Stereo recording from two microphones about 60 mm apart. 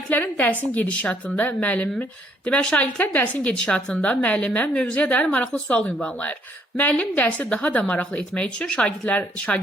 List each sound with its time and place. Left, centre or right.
0.1 s a woman's voice: left